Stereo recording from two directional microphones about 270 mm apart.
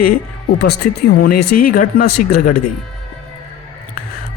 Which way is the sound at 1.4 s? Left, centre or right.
Left.